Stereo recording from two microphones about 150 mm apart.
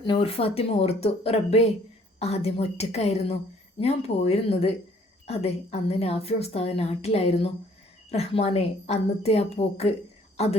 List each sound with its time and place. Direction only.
0.0 s a woman's voice: 35° left (ahead or behind)